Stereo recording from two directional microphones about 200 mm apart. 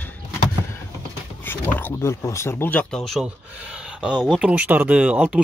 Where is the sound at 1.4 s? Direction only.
10° left (ahead or behind).